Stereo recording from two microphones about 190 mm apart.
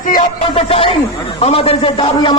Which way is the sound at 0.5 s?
30° left (ahead or behind).